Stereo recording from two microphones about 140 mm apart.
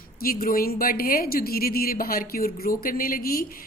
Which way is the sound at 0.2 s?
90° left.